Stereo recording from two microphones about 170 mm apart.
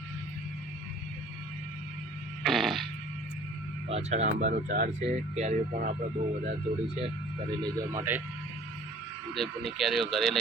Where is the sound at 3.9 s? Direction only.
40° right (ahead or behind).